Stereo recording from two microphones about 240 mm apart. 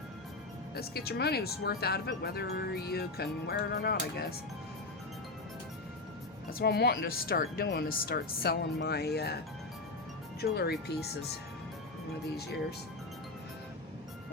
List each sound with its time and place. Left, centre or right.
0.8 s speech: left
6.5 s speech: left
10.4 s speech: left